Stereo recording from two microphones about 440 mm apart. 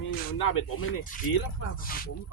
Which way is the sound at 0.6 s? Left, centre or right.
Left.